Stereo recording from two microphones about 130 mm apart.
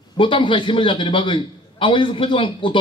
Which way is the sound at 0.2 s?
40° left (ahead or behind).